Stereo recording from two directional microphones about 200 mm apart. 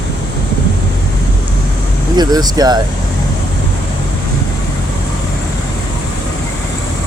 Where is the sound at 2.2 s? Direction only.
20° right (ahead or behind).